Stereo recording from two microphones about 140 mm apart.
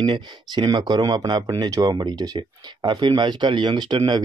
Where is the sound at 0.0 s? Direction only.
35° right (ahead or behind).